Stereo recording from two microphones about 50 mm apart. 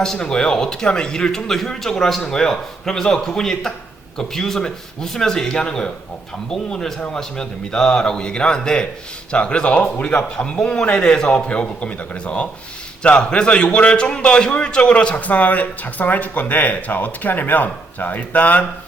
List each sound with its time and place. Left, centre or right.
0.0 s a man's voice: centre; by 18.6 s left